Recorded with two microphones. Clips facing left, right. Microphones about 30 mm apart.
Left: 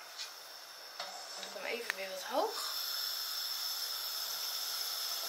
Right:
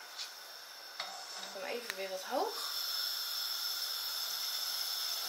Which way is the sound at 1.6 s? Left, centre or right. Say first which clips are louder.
Left 3 dB; left.